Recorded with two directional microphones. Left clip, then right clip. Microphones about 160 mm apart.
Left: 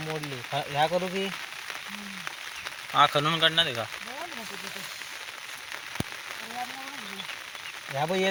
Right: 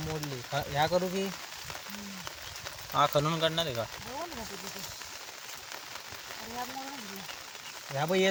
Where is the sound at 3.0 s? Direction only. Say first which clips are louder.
Left 5 dB; centre (ahead or behind).